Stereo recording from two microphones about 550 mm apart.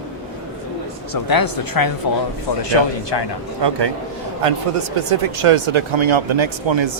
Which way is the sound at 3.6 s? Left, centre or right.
Right.